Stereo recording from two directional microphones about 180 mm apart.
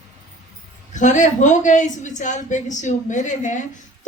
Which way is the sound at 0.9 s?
45° left (ahead or behind).